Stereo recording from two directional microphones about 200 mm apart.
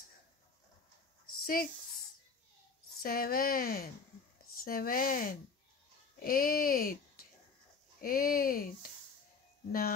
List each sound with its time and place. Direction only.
1.2 s a sound: 45° left (ahead or behind)
3.0 s speech: 45° left (ahead or behind)
9.7 s speech: 45° left (ahead or behind)